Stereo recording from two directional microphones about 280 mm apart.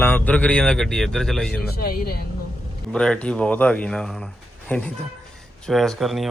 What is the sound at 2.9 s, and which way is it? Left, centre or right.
A man's voice, centre.